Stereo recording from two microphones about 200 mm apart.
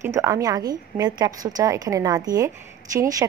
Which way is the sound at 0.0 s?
15° right (ahead or behind).